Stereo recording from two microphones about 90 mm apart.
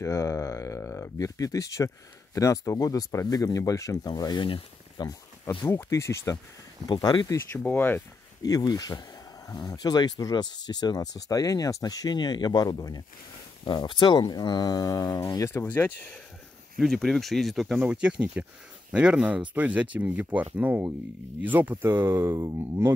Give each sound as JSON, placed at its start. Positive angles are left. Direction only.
{"t": 0.0, "sound": "speech", "side_deg": 35}
{"t": 4.9, "sound": "a sound", "side_deg": 45}
{"t": 5.6, "sound": "speech", "side_deg": 35}
{"t": 6.9, "sound": "speech", "side_deg": 50}
{"t": 7.5, "sound": "speech", "side_deg": 20}
{"t": 8.5, "sound": "speech", "side_deg": 45}
{"t": 13.7, "sound": "speech", "side_deg": 60}
{"t": 16.7, "sound": "speech", "side_deg": 0}